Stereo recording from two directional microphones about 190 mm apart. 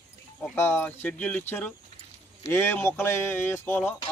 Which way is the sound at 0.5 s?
10° left (ahead or behind).